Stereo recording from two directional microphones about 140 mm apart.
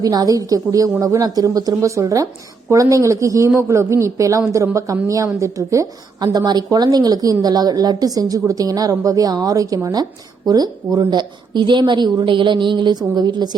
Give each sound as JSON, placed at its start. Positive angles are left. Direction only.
{"t": 0.0, "sound": "a woman's voice", "side_deg": -25}